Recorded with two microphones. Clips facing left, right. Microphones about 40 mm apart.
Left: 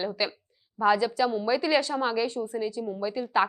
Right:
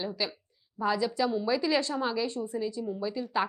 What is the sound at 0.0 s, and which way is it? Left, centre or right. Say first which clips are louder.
A woman's voice: left 4 dB; centre.